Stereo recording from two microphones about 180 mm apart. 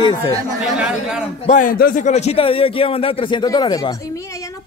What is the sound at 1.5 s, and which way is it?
A man's voice, 50° left (ahead or behind).